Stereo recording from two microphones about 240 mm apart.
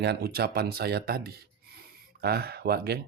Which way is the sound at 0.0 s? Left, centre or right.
Right.